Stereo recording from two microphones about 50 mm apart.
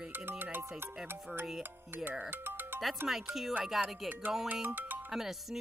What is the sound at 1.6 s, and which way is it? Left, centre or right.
Speech, right.